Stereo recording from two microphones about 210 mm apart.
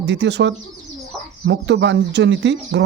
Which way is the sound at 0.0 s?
55° right (ahead or behind).